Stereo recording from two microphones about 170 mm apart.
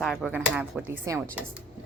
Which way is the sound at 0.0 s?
Centre (ahead or behind).